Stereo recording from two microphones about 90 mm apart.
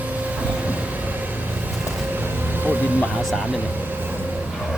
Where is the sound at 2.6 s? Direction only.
20° right (ahead or behind).